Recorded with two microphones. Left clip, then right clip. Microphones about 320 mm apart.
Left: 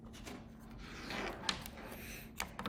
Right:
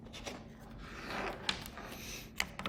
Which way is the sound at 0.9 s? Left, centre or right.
Centre.